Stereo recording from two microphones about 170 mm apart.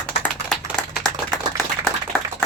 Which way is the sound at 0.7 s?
5° left (ahead or behind).